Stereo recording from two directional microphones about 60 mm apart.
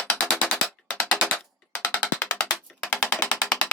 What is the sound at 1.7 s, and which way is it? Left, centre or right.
Music, left.